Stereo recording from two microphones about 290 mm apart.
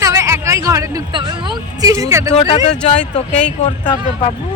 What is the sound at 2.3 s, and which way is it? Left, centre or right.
Speech, centre.